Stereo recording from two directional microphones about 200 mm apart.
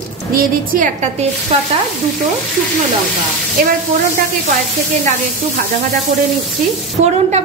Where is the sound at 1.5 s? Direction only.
30° right (ahead or behind).